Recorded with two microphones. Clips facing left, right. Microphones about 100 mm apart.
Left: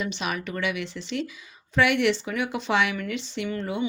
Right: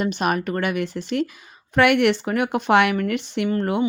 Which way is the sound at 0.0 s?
50° right (ahead or behind).